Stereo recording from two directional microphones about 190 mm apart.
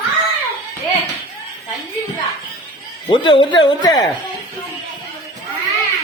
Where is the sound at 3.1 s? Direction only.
25° left (ahead or behind).